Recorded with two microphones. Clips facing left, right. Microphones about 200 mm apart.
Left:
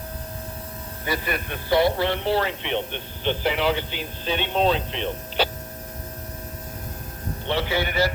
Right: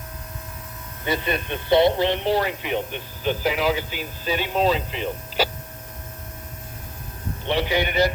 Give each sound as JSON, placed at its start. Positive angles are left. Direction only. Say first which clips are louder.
{"t": 1.0, "sound": "speech", "louder": "right 3 dB", "side_deg": -25}
{"t": 7.4, "sound": "speech", "louder": "right 2 dB", "side_deg": -15}